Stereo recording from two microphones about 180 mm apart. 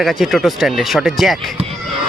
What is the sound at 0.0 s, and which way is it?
Speech, centre (ahead or behind).